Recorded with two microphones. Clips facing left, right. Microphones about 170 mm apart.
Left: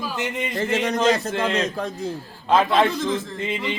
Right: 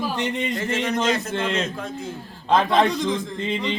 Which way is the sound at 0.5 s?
35° left (ahead or behind).